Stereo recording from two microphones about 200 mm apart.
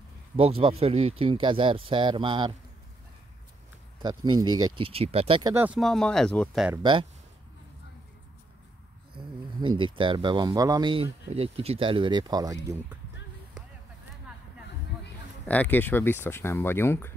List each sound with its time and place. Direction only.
0.4 s speech: 30° right (ahead or behind)
4.0 s speech: 20° right (ahead or behind)
5.5 s speech: 10° right (ahead or behind)
5.8 s speech: centre (ahead or behind)
6.7 s speech: 25° right (ahead or behind)
9.8 s speech: 25° right (ahead or behind)
15.4 s speech: 10° left (ahead or behind)